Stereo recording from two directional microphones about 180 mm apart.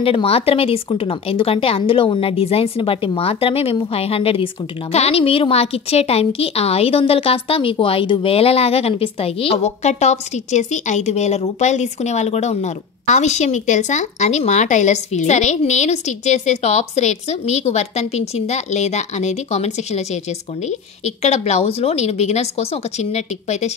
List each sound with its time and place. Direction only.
0.0 s a woman's voice: 30° left (ahead or behind)